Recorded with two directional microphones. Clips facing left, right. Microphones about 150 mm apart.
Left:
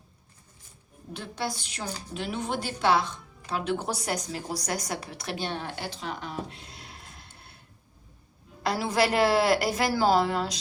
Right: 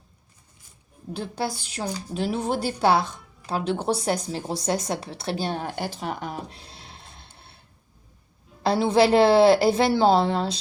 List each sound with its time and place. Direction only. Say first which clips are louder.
1.1 s a woman's voice: right 4 dB; 35° right (ahead or behind)
6.6 s a sound: right 1 dB; 30° right (ahead or behind)
8.6 s a woman's voice: right 6 dB; 30° right (ahead or behind)